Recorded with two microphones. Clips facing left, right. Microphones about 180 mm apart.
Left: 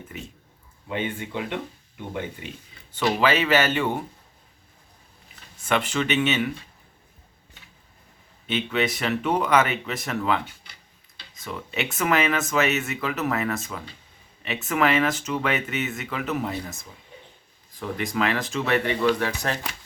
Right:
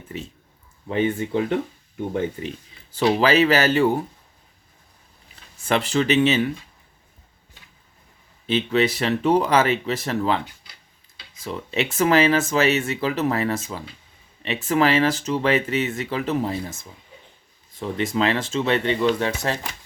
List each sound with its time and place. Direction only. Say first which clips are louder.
0.9 s speech: right 7 dB; 40° right (ahead or behind)
5.6 s speech: right 4 dB; 35° right (ahead or behind)
8.4 s speech: right 5 dB; 35° right (ahead or behind)
11.4 s speech: right 5 dB; 35° right (ahead or behind)
17.7 s speech: right 3 dB; 25° right (ahead or behind)